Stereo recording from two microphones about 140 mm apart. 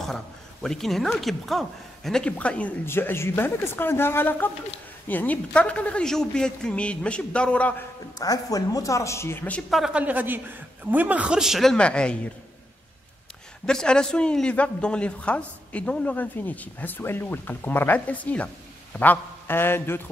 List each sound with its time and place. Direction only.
0.0 s speech: 5° left (ahead or behind)
8.2 s speech: 25° left (ahead or behind)
9.7 s speech: centre (ahead or behind)
13.7 s speech: 5° left (ahead or behind)